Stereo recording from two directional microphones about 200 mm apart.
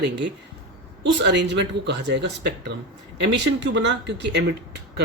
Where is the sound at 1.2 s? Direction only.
60° right (ahead or behind).